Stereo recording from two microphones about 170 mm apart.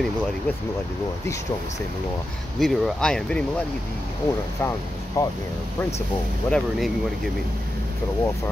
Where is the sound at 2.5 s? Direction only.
Centre (ahead or behind).